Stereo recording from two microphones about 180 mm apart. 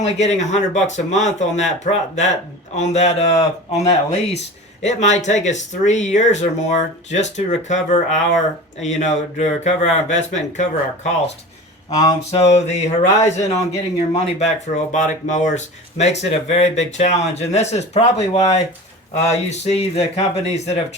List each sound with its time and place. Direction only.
0.0 s speech: 40° left (ahead or behind)
11.9 s a sound: 20° left (ahead or behind)
12.3 s speech: 35° left (ahead or behind)